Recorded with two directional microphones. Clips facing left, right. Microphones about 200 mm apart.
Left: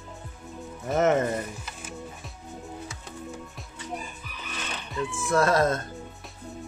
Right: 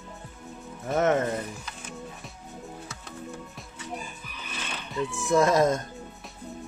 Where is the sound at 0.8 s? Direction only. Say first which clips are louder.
Left 1 dB; centre (ahead or behind).